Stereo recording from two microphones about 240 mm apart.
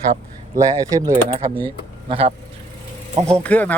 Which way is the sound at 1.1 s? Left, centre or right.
Right.